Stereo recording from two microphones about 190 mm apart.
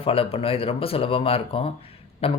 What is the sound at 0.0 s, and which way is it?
Speech, 30° left (ahead or behind).